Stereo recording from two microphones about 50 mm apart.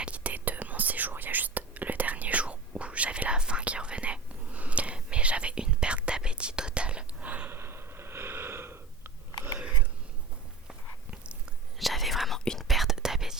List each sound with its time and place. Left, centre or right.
0.0 s whispering: right
7.5 s gasp: right
11.1 s biting: right
11.8 s whispering: centre